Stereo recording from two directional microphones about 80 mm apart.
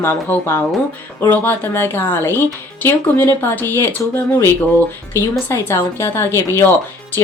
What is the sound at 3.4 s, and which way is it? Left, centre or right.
A woman's voice, left.